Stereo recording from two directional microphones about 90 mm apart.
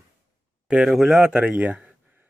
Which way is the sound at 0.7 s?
5° right (ahead or behind).